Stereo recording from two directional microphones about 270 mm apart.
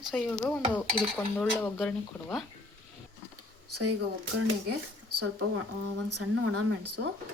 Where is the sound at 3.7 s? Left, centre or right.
Right.